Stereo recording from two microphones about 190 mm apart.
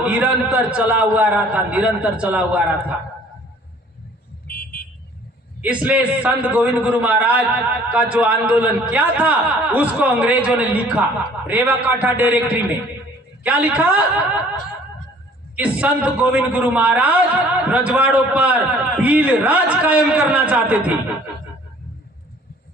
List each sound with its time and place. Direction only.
0.0 s a man's voice: 5° right (ahead or behind)
4.4 s vehicle: 50° left (ahead or behind)
5.6 s a man's voice: 5° right (ahead or behind)
15.5 s a man's voice: 5° right (ahead or behind)